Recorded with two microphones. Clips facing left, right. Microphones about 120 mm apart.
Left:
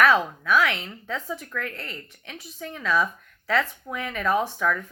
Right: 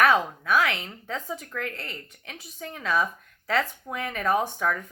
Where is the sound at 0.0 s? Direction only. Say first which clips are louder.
Left 1 dB; 45° right (ahead or behind).